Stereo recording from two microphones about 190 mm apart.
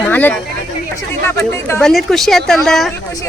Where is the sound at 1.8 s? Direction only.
Centre (ahead or behind).